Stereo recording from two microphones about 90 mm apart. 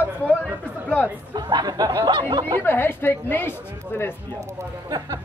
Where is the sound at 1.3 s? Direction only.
50° right (ahead or behind).